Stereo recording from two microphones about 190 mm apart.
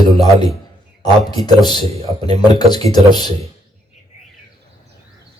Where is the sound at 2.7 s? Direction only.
20° left (ahead or behind).